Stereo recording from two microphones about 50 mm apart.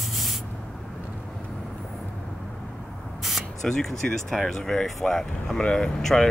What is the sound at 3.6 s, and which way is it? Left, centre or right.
Speech, centre.